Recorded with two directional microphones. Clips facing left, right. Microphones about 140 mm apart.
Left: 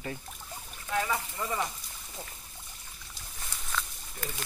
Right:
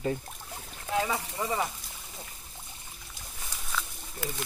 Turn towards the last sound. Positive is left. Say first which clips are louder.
# right 3 dB
turn(degrees=-5)  # may be behind; listen again after turning